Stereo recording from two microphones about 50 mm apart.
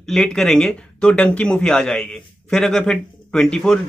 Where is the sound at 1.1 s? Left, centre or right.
Left.